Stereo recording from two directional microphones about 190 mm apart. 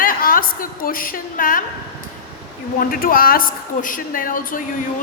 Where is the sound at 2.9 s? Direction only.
50° left (ahead or behind).